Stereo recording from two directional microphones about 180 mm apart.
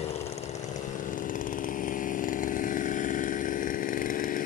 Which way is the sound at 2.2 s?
50° left (ahead or behind).